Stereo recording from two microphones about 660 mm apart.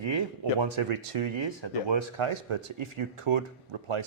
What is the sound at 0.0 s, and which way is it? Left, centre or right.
Speech, right.